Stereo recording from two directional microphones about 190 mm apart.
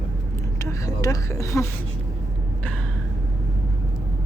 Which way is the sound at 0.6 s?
20° left (ahead or behind).